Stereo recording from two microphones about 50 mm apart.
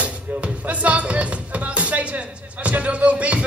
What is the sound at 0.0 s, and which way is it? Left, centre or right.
Music, right.